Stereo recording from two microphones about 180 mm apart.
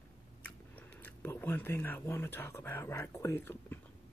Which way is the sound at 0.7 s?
10° left (ahead or behind).